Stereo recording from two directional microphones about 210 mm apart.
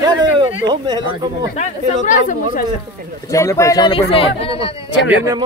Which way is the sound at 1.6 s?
35° left (ahead or behind).